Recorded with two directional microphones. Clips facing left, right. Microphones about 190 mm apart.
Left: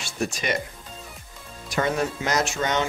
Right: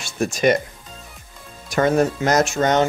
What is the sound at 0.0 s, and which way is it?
Speech, 45° right (ahead or behind).